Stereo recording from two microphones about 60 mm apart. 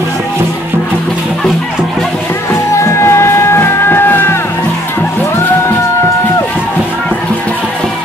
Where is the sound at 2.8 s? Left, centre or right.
Left.